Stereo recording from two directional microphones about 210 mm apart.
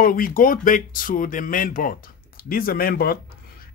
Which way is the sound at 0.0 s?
45° left (ahead or behind).